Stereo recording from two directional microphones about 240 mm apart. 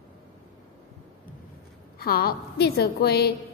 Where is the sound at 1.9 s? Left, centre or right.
Left.